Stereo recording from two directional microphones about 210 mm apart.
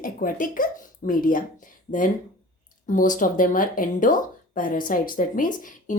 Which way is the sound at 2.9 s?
40° left (ahead or behind).